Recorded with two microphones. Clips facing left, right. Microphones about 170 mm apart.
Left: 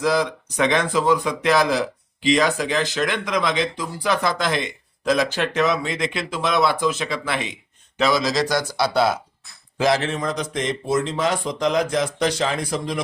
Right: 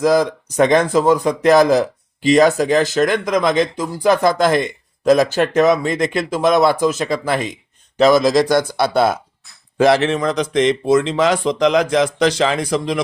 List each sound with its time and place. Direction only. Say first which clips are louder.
0.0 s a man's voice: right 6 dB; 45° right (ahead or behind)
9.7 s a man's voice: right 7 dB; 60° right (ahead or behind); by 13.0 s 90° right